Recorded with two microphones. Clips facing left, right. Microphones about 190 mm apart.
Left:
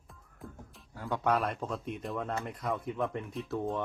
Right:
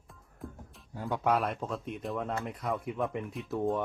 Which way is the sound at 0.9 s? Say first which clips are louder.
Right 1 dB; 15° right (ahead or behind).